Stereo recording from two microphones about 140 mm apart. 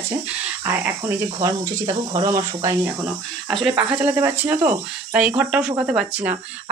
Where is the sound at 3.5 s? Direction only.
Centre (ahead or behind).